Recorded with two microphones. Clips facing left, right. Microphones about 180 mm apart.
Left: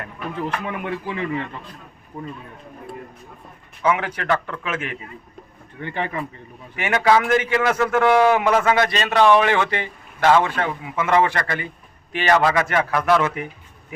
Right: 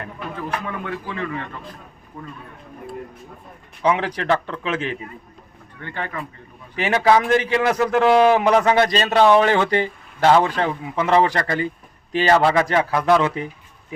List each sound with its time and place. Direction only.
0.3 s speech: 20° left (ahead or behind)
3.8 s speech: 30° right (ahead or behind)
5.8 s speech: 15° left (ahead or behind)
6.7 s a man's voice: 35° right (ahead or behind)
7.6 s a man's voice: 15° right (ahead or behind)